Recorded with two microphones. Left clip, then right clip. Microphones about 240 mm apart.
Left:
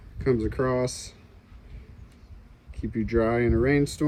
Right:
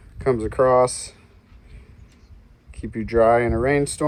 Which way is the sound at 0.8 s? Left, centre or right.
Left.